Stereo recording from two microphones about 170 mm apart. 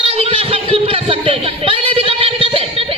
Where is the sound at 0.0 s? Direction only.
35° right (ahead or behind).